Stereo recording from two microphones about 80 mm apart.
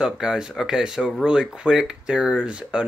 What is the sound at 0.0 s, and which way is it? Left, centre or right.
Speech, centre.